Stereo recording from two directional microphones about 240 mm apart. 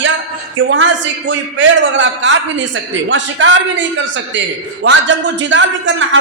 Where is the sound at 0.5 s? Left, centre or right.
Right.